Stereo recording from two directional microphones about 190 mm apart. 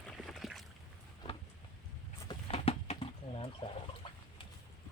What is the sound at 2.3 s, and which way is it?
Bird, 30° left (ahead or behind).